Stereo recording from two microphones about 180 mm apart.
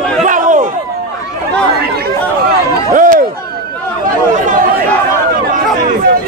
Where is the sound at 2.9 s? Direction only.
50° right (ahead or behind).